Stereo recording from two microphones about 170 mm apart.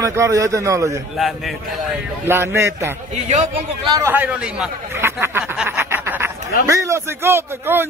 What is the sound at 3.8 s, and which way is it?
A man's voice, 15° right (ahead or behind).